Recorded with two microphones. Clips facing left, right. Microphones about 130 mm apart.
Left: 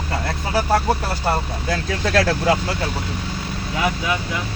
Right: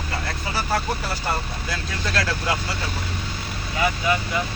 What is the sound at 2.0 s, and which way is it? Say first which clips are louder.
Speech: left 7 dB; 80° left.